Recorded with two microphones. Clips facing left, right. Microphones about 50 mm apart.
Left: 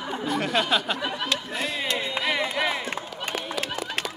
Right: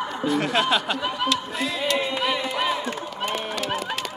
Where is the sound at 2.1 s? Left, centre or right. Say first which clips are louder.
Right 1 dB; left.